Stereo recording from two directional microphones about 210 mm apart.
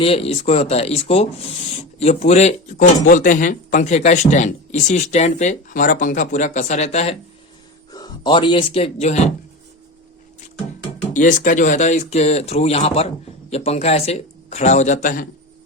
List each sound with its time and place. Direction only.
0.0 s speech: 25° left (ahead or behind)
7.9 s speech: 20° left (ahead or behind)
11.1 s speech: 35° left (ahead or behind)